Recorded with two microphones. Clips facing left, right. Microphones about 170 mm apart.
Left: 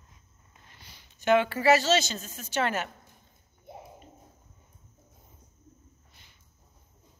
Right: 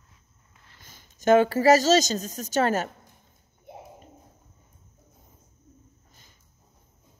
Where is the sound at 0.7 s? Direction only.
45° right (ahead or behind).